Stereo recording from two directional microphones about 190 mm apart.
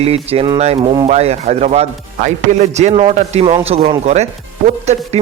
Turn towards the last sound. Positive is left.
turn(degrees=-35)  # may be behind; listen again after turning